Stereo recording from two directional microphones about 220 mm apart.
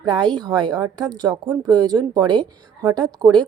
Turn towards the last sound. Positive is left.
turn(degrees=-20)  # may be behind; listen again after turning